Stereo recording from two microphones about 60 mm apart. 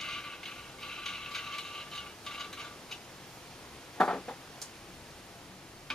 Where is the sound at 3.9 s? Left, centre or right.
Centre.